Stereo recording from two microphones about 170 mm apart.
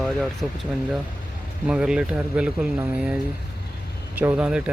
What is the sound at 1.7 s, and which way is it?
Speech, 5° right (ahead or behind).